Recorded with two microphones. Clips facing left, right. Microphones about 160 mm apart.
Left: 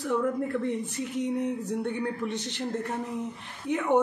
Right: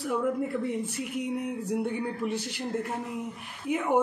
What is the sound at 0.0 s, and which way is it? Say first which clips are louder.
Speech: left 1 dB; 5° right (ahead or behind).